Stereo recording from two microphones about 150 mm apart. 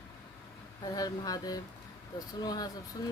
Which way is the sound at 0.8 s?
25° left (ahead or behind).